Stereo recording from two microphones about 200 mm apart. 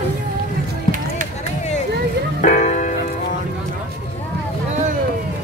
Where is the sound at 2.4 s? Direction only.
35° left (ahead or behind).